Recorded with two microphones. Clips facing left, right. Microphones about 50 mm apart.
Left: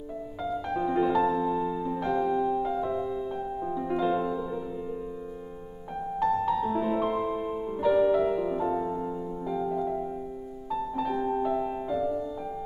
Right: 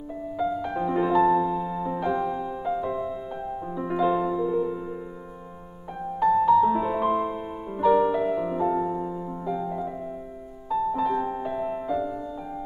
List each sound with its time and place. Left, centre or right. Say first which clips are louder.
0.4 s music: right 3 dB; centre
1.7 s music: right 1 dB; centre
2.0 s music: left 1 dB; centre
6.1 s music: right 7 dB; centre
11.5 s music: right 1 dB; centre